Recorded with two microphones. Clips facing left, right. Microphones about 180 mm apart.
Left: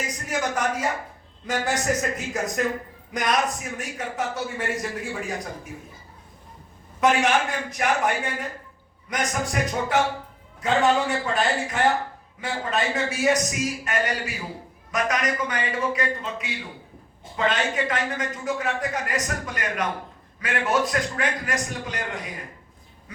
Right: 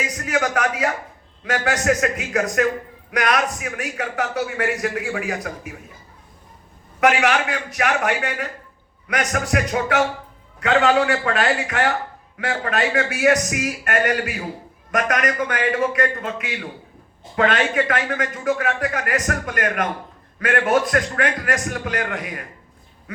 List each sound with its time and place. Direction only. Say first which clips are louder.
0.2 s a sound: right 5 dB; 70° right (ahead or behind)
1.5 s a man's voice: right 4 dB; 65° right (ahead or behind)
7.0 s a man's voice: right 2 dB; 70° right (ahead or behind)